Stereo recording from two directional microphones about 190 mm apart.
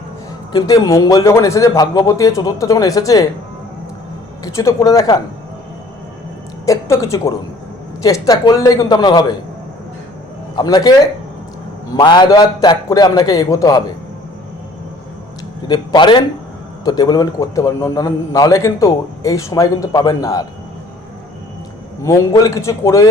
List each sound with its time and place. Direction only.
0.5 s a man's voice: 15° left (ahead or behind)
4.4 s a man's voice: 15° left (ahead or behind)
6.7 s a woman's voice: 15° left (ahead or behind)
10.5 s a man's voice: 20° left (ahead or behind)
11.9 s a man's voice: 20° left (ahead or behind)
15.6 s a man's voice: 25° left (ahead or behind)
22.0 s a man's voice: 15° left (ahead or behind)